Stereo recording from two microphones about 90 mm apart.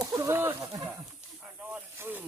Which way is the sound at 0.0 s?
30° right (ahead or behind).